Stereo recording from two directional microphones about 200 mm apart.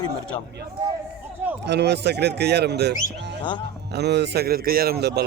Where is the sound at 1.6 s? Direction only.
55° right (ahead or behind).